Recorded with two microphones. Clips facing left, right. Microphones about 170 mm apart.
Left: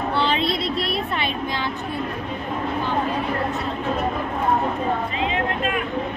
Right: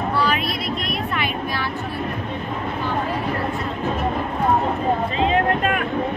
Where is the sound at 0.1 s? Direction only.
25° left (ahead or behind).